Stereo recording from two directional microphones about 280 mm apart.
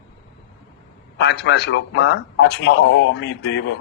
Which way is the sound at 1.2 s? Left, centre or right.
Left.